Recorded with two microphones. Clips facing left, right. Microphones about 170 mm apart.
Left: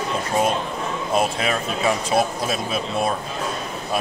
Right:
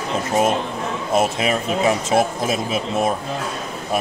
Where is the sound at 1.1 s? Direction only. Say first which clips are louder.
Right 3 dB; 20° right (ahead or behind).